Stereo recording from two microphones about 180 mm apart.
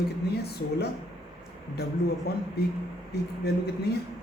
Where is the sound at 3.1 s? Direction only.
65° left (ahead or behind).